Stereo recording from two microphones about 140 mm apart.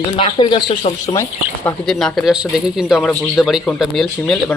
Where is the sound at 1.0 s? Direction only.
20° left (ahead or behind).